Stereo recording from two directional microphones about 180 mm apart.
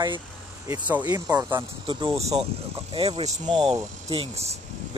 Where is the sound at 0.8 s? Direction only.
10° right (ahead or behind); by 4.5 s 35° right (ahead or behind).